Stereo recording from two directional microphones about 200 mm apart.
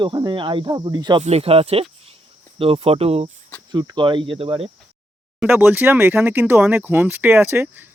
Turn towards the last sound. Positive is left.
turn(degrees=-10)  # may be behind; listen again after turning